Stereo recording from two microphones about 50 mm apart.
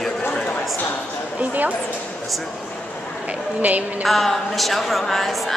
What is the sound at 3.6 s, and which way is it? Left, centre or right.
Music, right.